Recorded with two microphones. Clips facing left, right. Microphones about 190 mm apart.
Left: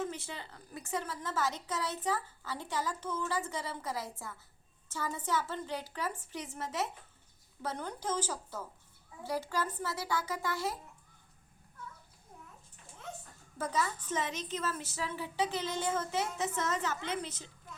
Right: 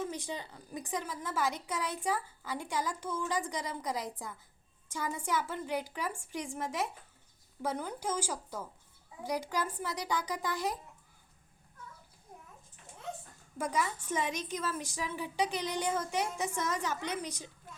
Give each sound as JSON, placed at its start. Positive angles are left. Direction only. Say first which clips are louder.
{"t": 0.0, "sound": "a woman's voice", "louder": "right 1 dB", "side_deg": -15}
{"t": 13.6, "sound": "a woman's voice", "louder": "right 1 dB", "side_deg": -10}